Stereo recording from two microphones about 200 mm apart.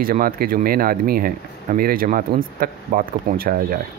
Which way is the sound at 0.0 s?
45° right (ahead or behind).